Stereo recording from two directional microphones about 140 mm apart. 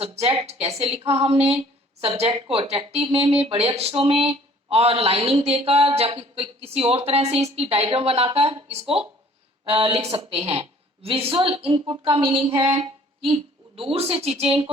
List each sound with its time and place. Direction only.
0.0 s a woman's voice: 45° right (ahead or behind)